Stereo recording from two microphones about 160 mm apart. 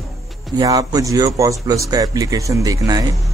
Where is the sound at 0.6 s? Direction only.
20° right (ahead or behind).